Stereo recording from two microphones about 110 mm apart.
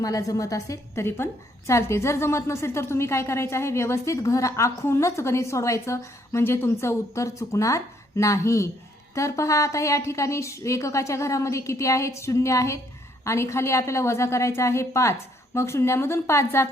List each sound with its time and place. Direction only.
0.0 s a woman's voice: 30° left (ahead or behind)